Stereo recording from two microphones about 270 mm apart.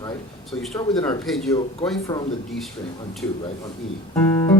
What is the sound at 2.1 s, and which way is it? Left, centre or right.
Speech, centre.